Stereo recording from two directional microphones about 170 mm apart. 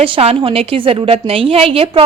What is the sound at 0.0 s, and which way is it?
A woman's voice, 35° right (ahead or behind).